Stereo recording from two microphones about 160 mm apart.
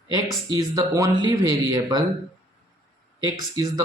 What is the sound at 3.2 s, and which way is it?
Speech, 25° right (ahead or behind).